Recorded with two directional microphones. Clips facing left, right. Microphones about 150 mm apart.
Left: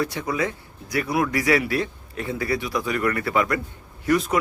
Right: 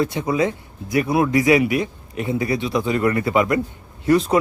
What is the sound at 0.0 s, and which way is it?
A man's voice, 20° right (ahead or behind).